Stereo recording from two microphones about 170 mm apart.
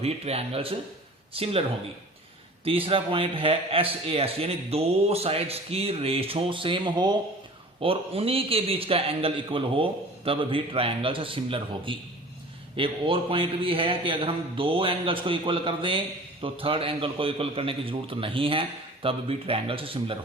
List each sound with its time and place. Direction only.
0.0 s a man's voice: 35° right (ahead or behind)
2.6 s a man's voice: 35° right (ahead or behind)